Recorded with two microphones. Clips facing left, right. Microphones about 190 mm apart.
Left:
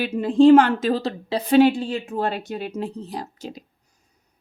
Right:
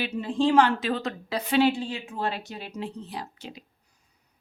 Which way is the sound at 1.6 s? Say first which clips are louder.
Left 7 dB; 50° left (ahead or behind).